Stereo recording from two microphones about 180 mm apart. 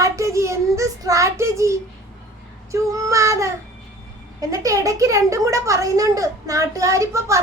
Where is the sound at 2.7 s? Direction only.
20° right (ahead or behind).